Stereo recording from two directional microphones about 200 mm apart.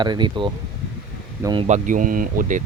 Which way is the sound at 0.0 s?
20° right (ahead or behind).